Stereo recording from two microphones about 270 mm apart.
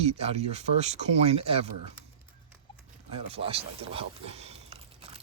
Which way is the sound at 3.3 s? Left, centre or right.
Right.